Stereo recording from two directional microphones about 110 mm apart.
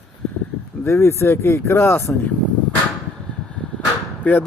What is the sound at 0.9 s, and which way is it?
Speech, 25° left (ahead or behind).